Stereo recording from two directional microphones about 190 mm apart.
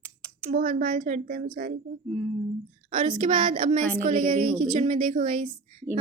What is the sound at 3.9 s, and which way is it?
A woman's voice, 45° right (ahead or behind).